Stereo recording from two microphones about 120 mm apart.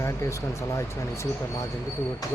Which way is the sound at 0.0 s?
25° left (ahead or behind).